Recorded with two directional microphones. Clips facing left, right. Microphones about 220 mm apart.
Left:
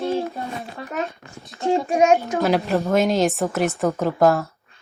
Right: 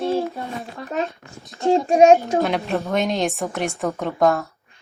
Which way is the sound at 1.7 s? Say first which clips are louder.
Right 4 dB; 30° right (ahead or behind).